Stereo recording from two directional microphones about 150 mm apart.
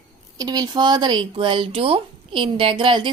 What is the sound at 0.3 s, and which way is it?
Speech, 25° right (ahead or behind).